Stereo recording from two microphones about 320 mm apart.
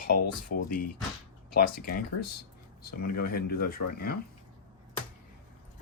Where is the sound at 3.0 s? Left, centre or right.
Left.